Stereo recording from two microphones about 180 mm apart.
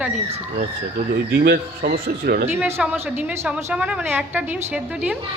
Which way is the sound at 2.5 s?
10° right (ahead or behind).